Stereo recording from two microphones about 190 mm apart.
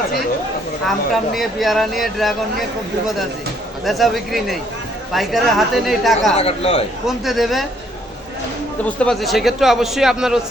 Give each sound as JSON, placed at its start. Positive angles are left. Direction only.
{"t": 0.9, "sound": "a man's voice", "side_deg": 0}
{"t": 3.8, "sound": "a man's voice", "side_deg": 0}
{"t": 6.3, "sound": "a man's voice", "side_deg": 30}
{"t": 7.3, "sound": "a man's voice", "side_deg": 0}
{"t": 8.8, "sound": "a man's voice", "side_deg": 5}